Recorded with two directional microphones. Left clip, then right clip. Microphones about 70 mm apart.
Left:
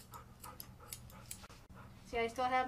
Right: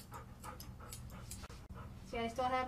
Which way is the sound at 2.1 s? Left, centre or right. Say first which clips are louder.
Left 2 dB; left.